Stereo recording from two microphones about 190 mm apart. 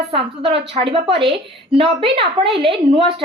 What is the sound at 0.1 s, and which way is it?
A woman's voice, 30° right (ahead or behind).